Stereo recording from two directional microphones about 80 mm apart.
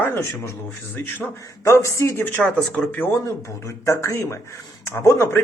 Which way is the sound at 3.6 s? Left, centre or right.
Left.